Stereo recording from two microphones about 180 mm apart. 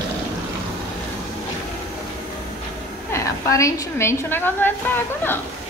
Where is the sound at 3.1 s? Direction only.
15° left (ahead or behind).